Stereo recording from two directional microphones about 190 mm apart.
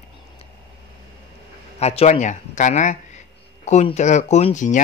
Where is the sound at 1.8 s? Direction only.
35° left (ahead or behind).